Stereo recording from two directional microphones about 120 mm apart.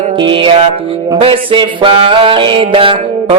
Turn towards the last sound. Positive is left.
turn(degrees=-50)  # may be behind; listen again after turning